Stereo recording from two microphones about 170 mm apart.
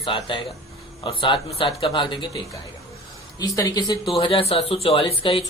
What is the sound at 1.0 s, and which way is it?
Speech, 30° left (ahead or behind).